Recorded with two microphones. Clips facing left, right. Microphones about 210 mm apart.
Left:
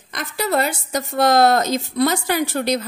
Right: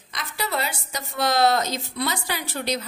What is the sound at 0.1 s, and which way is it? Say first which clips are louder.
A woman's voice: left 7 dB; 50° left (ahead or behind).